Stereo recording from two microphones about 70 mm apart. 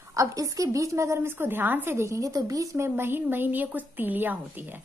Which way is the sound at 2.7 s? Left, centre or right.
Right.